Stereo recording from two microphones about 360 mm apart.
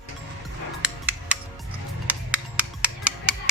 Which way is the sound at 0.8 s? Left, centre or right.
Centre.